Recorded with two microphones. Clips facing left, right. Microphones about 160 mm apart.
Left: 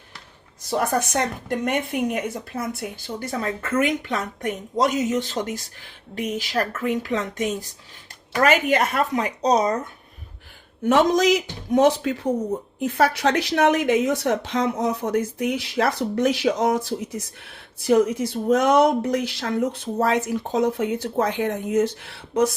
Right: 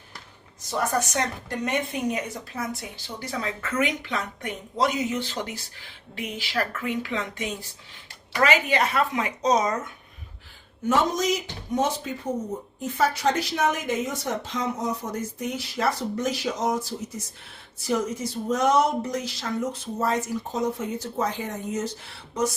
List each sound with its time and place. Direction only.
0.9 s a woman's voice: 60° left (ahead or behind); by 9.9 s 35° left (ahead or behind)
10.8 s speech: 80° left; by 21.8 s 55° left (ahead or behind)